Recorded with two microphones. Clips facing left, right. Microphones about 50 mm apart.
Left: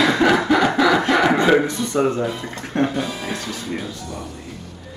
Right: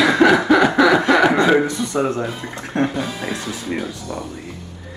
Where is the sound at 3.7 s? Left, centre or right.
Right.